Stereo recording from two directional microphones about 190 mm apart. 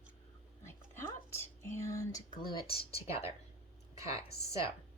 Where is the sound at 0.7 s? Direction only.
15° left (ahead or behind); by 3.3 s 30° left (ahead or behind).